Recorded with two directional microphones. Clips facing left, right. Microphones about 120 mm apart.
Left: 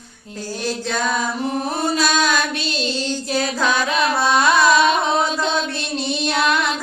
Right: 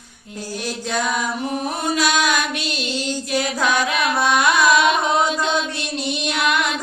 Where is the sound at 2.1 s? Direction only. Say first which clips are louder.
Left 1 dB; 15° right (ahead or behind).